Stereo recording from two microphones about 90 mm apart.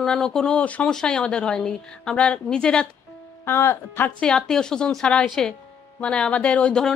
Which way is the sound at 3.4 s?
25° left (ahead or behind).